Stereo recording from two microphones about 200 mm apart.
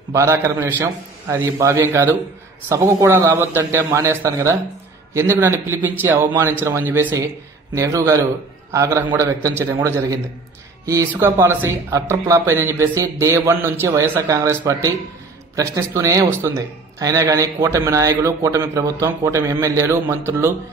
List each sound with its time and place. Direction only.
0.1 s a man's voice: 15° right (ahead or behind)